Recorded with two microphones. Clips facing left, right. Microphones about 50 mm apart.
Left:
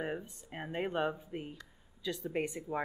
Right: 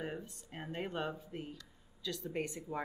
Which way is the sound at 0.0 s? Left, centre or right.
Centre.